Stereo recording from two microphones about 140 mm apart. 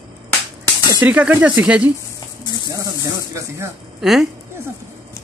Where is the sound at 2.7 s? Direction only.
25° right (ahead or behind).